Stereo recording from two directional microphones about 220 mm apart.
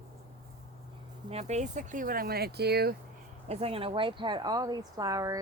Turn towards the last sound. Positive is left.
turn(degrees=-15)  # may be behind; listen again after turning